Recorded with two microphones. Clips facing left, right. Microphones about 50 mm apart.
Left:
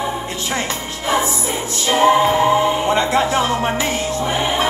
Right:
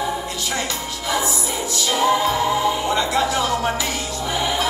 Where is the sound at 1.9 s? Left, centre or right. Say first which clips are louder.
Left 5 dB; left.